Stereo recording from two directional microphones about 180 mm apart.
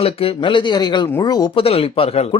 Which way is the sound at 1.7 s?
30° left (ahead or behind).